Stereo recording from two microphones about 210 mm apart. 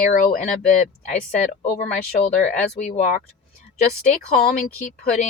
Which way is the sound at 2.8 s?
35° left (ahead or behind).